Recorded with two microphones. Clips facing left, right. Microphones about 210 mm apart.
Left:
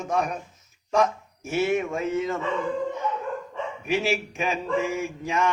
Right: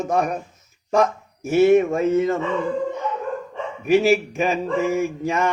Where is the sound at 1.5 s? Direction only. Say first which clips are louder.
Right 9 dB; 45° right (ahead or behind).